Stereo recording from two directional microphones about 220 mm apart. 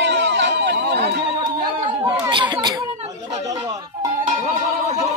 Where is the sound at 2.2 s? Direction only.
20° right (ahead or behind).